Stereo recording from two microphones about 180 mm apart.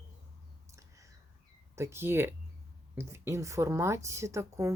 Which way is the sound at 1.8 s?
15° right (ahead or behind).